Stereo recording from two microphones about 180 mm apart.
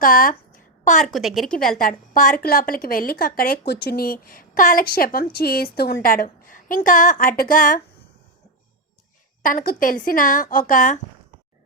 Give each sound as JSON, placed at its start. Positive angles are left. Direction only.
{"t": 0.0, "sound": "a sound", "side_deg": 50}
{"t": 1.0, "sound": "a woman's voice", "side_deg": 0}
{"t": 1.8, "sound": "a woman's voice", "side_deg": 50}
{"t": 9.4, "sound": "a woman's voice", "side_deg": 50}